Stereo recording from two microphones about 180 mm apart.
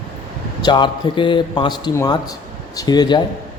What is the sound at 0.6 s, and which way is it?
Speech, 25° left (ahead or behind).